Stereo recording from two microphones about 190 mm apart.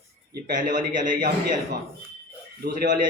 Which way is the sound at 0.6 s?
40° right (ahead or behind).